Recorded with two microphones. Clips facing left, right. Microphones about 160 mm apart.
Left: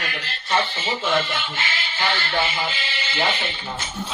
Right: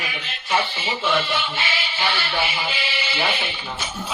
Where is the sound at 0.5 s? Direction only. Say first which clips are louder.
Even; 15° right (ahead or behind).